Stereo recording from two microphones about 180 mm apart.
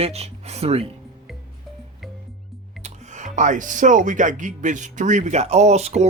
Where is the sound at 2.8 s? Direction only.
40° right (ahead or behind).